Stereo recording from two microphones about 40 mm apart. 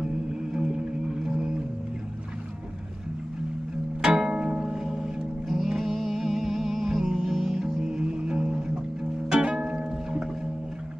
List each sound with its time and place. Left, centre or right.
0.0 s music: centre
4.0 s music: centre